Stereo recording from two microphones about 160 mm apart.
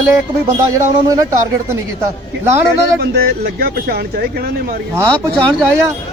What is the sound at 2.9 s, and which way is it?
Speech, 85° right.